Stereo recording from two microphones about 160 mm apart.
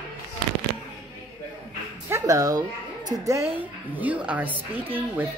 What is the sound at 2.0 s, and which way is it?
Speech, 20° right (ahead or behind).